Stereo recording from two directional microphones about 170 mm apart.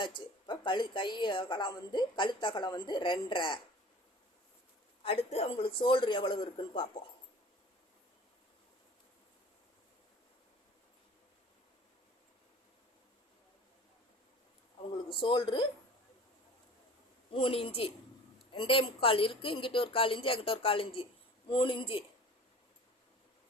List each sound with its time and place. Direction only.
0.0 s speech: 30° left (ahead or behind)
5.0 s speech: 35° left (ahead or behind)
14.9 s speech: 30° left (ahead or behind)
17.3 s a woman's voice: 30° left (ahead or behind)